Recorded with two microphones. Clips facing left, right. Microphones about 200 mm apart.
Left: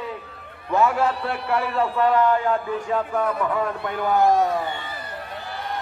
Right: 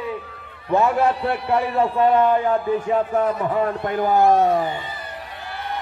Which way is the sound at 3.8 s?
50° right (ahead or behind).